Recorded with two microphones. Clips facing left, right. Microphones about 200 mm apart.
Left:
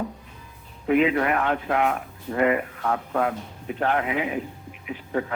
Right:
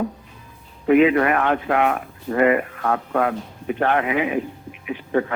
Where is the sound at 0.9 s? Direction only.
70° right (ahead or behind).